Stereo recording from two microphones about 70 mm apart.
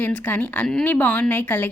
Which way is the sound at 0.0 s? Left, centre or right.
Left.